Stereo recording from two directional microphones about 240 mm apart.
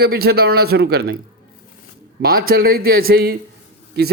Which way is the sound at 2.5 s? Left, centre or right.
Right.